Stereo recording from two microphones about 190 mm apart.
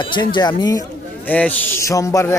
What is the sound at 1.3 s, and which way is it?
A man's voice, 10° left (ahead or behind).